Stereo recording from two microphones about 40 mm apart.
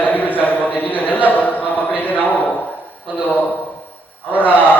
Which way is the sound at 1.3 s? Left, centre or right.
Left.